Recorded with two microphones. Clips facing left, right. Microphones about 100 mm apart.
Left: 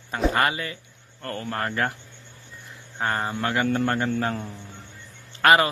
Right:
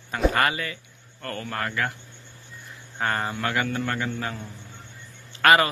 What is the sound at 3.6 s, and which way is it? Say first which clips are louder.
Speech: left 5 dB; 40° left (ahead or behind).